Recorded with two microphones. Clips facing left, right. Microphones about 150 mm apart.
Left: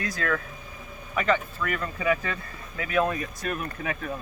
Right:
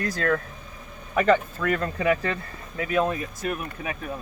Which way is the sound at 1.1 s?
45° right (ahead or behind).